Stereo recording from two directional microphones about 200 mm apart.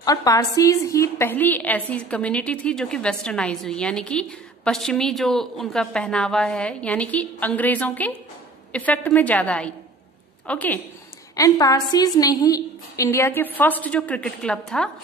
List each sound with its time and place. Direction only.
0.0 s a woman's voice: 20° left (ahead or behind); by 14.9 s 5° left (ahead or behind)